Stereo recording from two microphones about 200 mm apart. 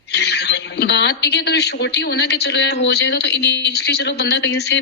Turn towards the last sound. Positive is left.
turn(degrees=60)  # may be behind; listen again after turning